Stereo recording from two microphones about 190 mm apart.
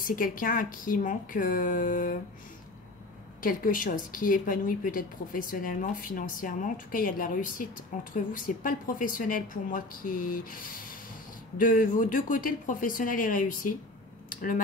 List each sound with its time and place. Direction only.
0.0 s a woman's voice: 45° left (ahead or behind)
3.3 s a woman's voice: 45° left (ahead or behind)